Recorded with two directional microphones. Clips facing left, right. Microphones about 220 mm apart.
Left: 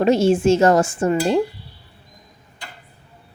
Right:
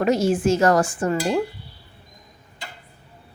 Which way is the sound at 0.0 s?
25° left (ahead or behind).